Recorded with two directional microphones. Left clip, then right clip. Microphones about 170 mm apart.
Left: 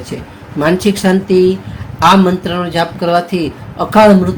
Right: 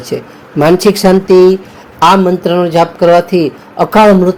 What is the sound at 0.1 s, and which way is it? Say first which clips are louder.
Speech: right 8 dB; 40° right (ahead or behind).